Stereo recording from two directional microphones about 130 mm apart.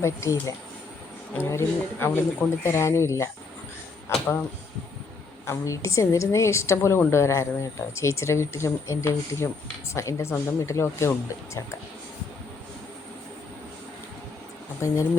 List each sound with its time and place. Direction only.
0.0 s a woman's voice: 25° left (ahead or behind)
5.5 s a woman's voice: 25° left (ahead or behind)
14.8 s a woman's voice: 25° left (ahead or behind)